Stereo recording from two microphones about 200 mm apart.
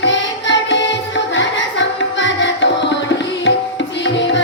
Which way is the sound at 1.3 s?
65° left (ahead or behind).